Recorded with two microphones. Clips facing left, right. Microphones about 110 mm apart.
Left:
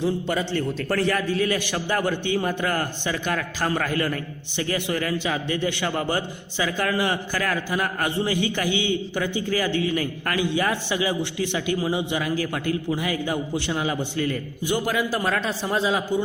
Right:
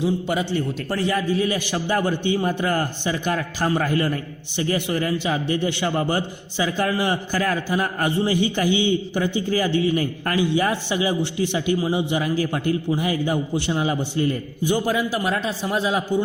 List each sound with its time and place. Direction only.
0.0 s a man's voice: 15° right (ahead or behind)